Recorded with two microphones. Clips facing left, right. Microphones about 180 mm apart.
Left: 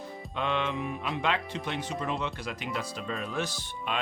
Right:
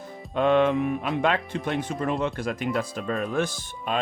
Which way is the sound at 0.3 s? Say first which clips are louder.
Right 10 dB; 50° right (ahead or behind).